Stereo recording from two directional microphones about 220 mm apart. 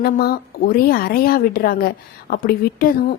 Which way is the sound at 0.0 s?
45° left (ahead or behind).